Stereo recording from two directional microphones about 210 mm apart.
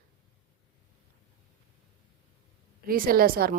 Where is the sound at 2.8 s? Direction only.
45° right (ahead or behind).